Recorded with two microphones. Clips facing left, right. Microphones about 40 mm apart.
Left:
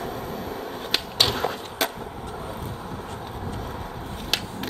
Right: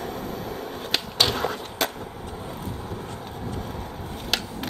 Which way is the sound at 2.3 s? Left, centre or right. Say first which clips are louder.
Left 2 dB; left.